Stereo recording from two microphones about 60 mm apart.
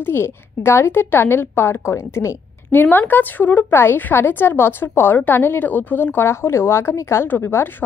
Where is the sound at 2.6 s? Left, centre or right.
Left.